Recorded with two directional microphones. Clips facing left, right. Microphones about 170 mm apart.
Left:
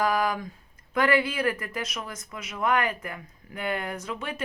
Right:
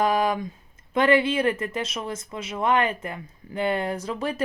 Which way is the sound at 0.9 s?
25° right (ahead or behind).